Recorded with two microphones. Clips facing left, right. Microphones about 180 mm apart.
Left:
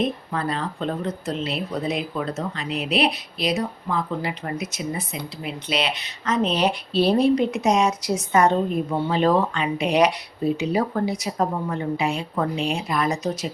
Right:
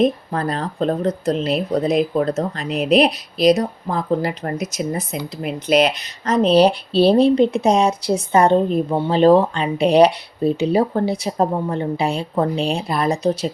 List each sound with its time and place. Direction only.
0.0 s speech: 40° right (ahead or behind)